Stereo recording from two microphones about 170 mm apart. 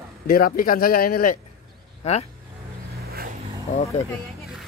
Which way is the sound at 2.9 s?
60° right (ahead or behind).